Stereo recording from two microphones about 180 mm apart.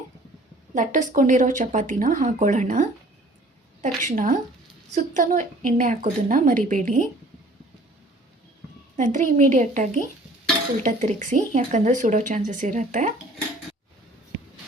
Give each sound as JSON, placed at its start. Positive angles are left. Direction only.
{"t": 0.7, "sound": "speech", "side_deg": -45}
{"t": 9.0, "sound": "speech", "side_deg": -45}